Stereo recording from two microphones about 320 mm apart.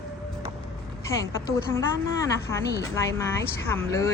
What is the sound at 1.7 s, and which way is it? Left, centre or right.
A woman's voice, centre.